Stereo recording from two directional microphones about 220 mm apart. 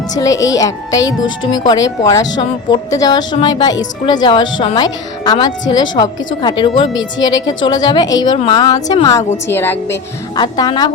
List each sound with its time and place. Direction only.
0.1 s a woman's voice: 15° left (ahead or behind)
1.0 s speech: 60° left (ahead or behind)
1.6 s a woman's voice: 15° left (ahead or behind)